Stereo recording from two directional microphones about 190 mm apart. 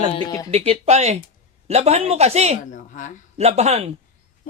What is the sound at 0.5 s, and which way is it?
Speech, 30° right (ahead or behind).